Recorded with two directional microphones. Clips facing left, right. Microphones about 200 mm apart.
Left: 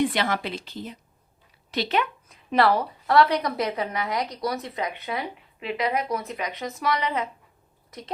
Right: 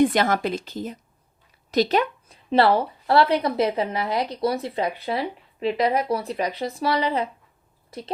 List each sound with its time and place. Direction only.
0.0 s a woman's voice: 45° right (ahead or behind); by 8.1 s 30° right (ahead or behind)